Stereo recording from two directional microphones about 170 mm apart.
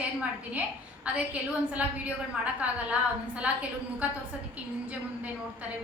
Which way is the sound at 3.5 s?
5° right (ahead or behind).